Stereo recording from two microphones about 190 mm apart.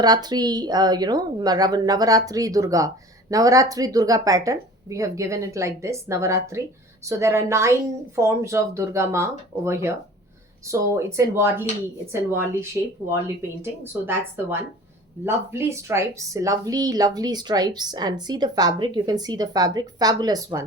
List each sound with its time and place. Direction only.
0.0 s a woman's voice: 20° right (ahead or behind)
15.2 s a woman's voice: 15° right (ahead or behind)